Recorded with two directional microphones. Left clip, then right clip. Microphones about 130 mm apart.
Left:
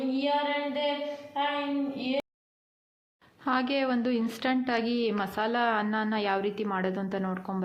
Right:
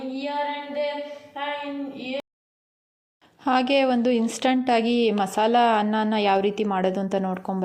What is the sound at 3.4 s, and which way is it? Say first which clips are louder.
A woman's voice: right 7 dB; 45° right (ahead or behind).